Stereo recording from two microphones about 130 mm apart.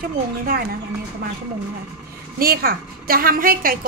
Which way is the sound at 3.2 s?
90° right.